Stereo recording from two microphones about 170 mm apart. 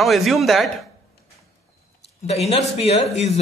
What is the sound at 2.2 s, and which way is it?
Speech, 40° left (ahead or behind).